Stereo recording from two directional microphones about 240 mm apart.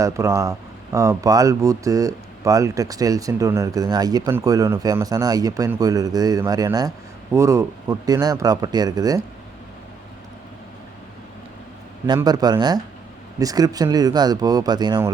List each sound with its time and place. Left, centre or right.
0.0 s speech: centre
12.0 s speech: centre